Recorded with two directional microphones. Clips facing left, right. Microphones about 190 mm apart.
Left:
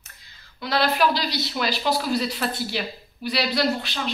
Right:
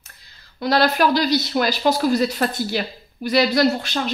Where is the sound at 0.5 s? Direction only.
40° right (ahead or behind).